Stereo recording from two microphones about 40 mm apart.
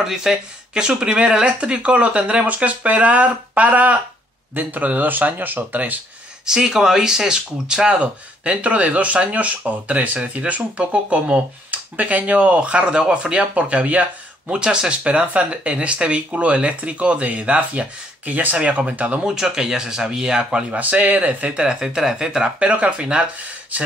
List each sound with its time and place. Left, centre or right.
0.0 s speech: centre; by 2.4 s right
2.4 s speech: right
6.4 s speech: centre
8.0 s speech: right
14.5 s speech: right
15.0 s speech: right
18.6 s speech: right
19.2 s speech: centre
20.7 s speech: right
21.4 s speech: right
22.6 s speech: right